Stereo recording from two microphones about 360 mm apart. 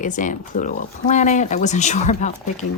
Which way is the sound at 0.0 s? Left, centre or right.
Left.